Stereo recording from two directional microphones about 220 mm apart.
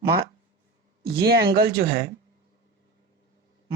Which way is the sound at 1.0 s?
45° right (ahead or behind).